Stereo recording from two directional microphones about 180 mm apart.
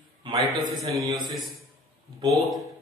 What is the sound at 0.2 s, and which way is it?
Speech, 20° right (ahead or behind).